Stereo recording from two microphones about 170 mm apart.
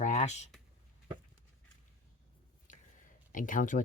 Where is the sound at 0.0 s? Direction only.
40° left (ahead or behind).